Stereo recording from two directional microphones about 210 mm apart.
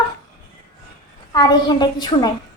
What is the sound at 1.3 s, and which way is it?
A woman's voice, 20° left (ahead or behind).